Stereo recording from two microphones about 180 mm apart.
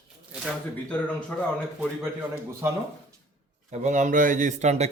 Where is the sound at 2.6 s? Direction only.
15° right (ahead or behind).